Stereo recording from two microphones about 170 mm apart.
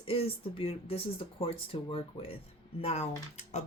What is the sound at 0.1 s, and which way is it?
Speech, 35° left (ahead or behind).